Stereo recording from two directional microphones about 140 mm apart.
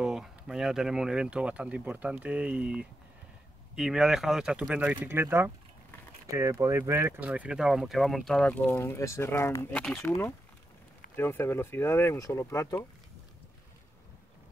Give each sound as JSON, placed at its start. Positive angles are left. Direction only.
{"t": 0.0, "sound": "speech", "side_deg": -5}
{"t": 9.7, "sound": "speech", "side_deg": 10}